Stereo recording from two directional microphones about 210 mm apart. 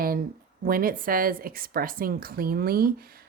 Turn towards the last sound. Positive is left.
turn(degrees=-45)  # may be behind; listen again after turning